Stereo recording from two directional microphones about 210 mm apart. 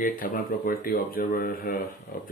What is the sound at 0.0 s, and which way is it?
Speech, 40° left (ahead or behind).